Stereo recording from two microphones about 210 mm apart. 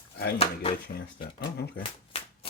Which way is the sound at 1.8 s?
25° left (ahead or behind).